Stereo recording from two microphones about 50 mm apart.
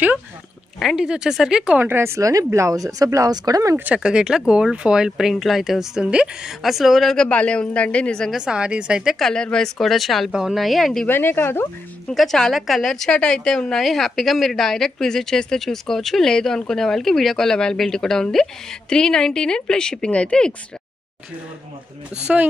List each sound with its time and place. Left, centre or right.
0.9 s speech: centre
2.0 s speech: right
3.9 s speech: centre
6.0 s a woman's voice: centre
6.6 s speech: centre
7.2 s a man's voice: left
8.3 s speech: centre
9.2 s a woman's voice: centre
9.8 s speech: centre
11.1 s speech: left
12.1 s speech: centre
13.1 s a woman's voice: centre
13.7 s a woman's voice: centre